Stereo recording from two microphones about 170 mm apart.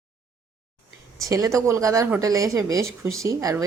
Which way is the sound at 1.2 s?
20° right (ahead or behind).